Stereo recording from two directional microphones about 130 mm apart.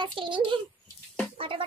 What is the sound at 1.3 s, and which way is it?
Music, 45° right (ahead or behind).